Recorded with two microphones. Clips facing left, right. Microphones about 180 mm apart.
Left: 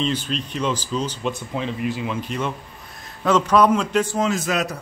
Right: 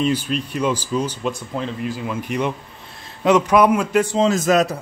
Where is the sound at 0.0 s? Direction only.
10° right (ahead or behind).